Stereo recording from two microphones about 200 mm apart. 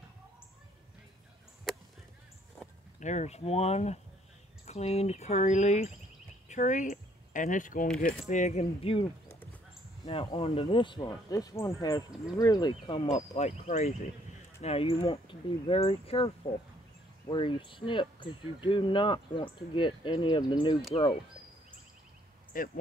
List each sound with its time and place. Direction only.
3.0 s speech: 35° left (ahead or behind)
10.3 s speech: 30° left (ahead or behind)
22.5 s speech: 45° left (ahead or behind)